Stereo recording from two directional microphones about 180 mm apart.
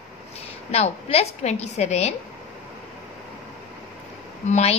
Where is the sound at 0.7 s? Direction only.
35° left (ahead or behind).